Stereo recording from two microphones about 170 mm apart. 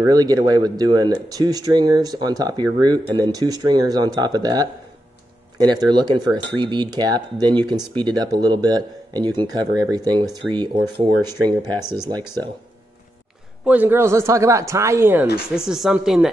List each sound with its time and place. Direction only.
0.1 s speech: 20° right (ahead or behind)
13.7 s speech: 10° right (ahead or behind)
15.5 s speech: 5° right (ahead or behind)